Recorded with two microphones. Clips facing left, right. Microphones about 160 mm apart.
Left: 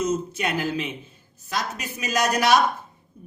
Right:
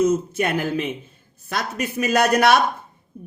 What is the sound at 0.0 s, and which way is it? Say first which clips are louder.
A woman's voice: right 6 dB; 55° right (ahead or behind).